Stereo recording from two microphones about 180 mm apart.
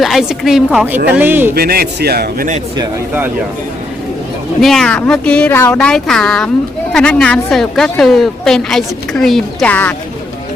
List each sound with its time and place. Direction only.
0.0 s speech: centre (ahead or behind)
1.5 s a man's voice: 55° right (ahead or behind)
4.6 s speech: centre (ahead or behind)